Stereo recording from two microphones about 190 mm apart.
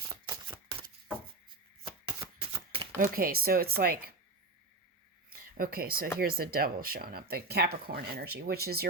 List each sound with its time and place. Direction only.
0.4 s single-lens reflex camera: 25° right (ahead or behind)
1.8 s shuffling cards: 25° right (ahead or behind)
3.0 s speech: 50° right (ahead or behind)
5.3 s a sound: 50° right (ahead or behind)
6.1 s speech: 50° right (ahead or behind)